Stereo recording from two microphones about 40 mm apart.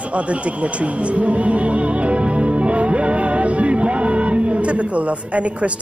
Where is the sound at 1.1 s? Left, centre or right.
Right.